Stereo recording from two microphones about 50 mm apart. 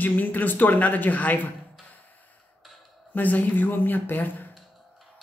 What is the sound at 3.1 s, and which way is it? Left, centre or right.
Speech, left.